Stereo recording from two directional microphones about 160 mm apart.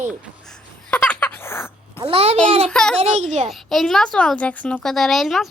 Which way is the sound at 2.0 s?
35° right (ahead or behind).